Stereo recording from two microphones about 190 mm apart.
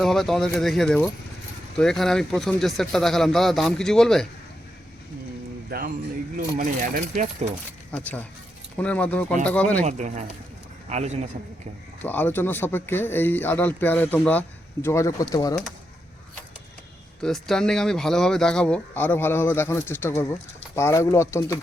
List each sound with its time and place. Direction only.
0.0 s speech: centre (ahead or behind)
5.7 s a sound: 55° right (ahead or behind)
6.3 s speech: 50° right (ahead or behind)
7.9 s speech: 10° left (ahead or behind)
9.8 s a man's voice: 40° right (ahead or behind)
12.0 s speech: 10° left (ahead or behind)
17.2 s speech: centre (ahead or behind)